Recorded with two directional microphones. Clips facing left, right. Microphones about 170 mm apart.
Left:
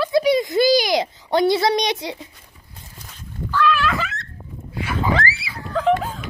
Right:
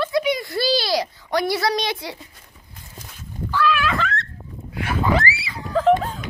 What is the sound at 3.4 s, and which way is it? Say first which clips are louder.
Dog: left 1 dB; 5° right (ahead or behind).